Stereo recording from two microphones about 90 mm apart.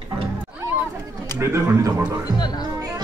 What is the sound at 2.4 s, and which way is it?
Speech, 50° left (ahead or behind).